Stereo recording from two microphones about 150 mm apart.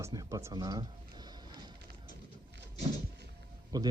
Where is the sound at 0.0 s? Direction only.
25° right (ahead or behind).